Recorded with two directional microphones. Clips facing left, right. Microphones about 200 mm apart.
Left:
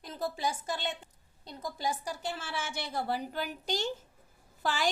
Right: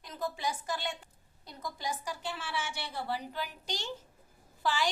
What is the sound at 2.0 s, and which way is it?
A woman's voice, 40° left (ahead or behind).